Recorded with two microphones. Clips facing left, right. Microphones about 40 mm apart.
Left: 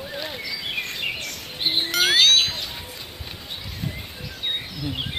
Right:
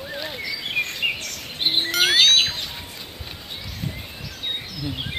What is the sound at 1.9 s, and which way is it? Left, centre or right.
Bird, centre.